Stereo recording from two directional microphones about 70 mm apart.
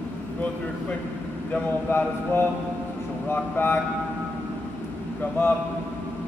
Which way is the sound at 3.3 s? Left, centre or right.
Left.